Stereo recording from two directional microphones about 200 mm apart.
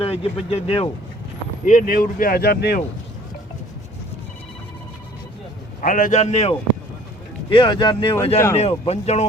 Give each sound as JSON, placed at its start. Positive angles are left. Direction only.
{"t": 0.0, "sound": "speech", "side_deg": 30}
{"t": 1.6, "sound": "speech", "side_deg": 40}
{"t": 5.8, "sound": "a man's voice", "side_deg": 40}
{"t": 7.5, "sound": "a man's voice", "side_deg": 25}